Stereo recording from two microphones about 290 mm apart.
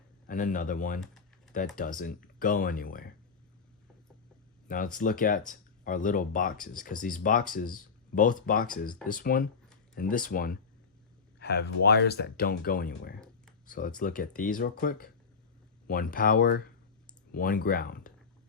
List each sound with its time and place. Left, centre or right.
0.3 s speech: left
4.7 s speech: left